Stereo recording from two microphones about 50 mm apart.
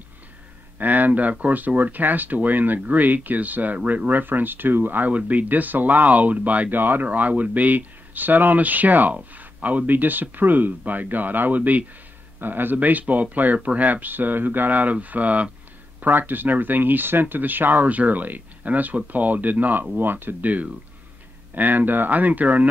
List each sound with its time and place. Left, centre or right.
0.7 s speech: right
16.0 s speech: right